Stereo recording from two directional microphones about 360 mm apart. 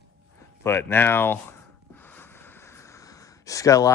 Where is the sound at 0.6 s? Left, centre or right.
Centre.